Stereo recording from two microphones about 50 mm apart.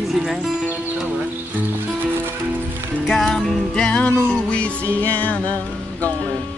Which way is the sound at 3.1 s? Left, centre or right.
Centre.